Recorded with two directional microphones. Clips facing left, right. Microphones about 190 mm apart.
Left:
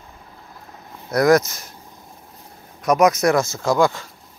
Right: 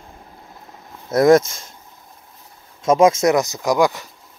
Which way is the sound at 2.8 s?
25° right (ahead or behind).